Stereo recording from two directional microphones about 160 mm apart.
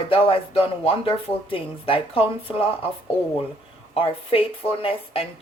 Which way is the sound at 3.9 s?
35° left (ahead or behind).